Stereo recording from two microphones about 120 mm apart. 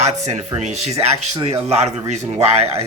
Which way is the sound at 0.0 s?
65° right (ahead or behind).